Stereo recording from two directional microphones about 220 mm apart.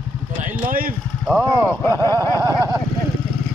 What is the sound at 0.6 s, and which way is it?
Speech, 40° right (ahead or behind).